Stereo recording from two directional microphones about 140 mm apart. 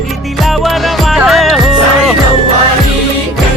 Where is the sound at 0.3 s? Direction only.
Centre (ahead or behind).